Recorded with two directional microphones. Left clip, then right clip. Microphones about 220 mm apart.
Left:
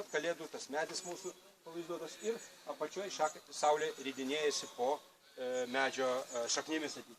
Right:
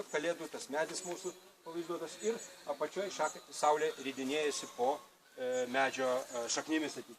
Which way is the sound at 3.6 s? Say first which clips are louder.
Right 2 dB; 15° left (ahead or behind).